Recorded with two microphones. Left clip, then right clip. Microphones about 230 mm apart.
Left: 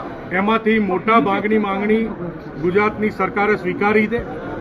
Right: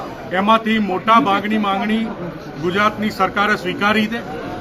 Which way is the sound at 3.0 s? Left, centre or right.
Centre.